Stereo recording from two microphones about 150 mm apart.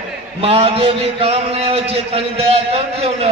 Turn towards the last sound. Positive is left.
turn(degrees=-40)  # may be behind; listen again after turning